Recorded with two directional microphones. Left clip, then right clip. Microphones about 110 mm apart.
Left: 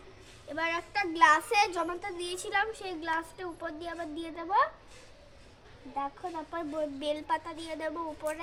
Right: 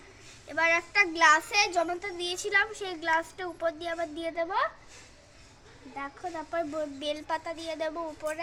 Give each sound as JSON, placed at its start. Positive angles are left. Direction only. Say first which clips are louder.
{"t": 0.5, "sound": "a woman's voice", "louder": "right 7 dB", "side_deg": 15}
{"t": 0.9, "sound": "a child's voice", "louder": "even", "side_deg": 35}
{"t": 6.5, "sound": "a woman's voice", "louder": "right 3 dB", "side_deg": 45}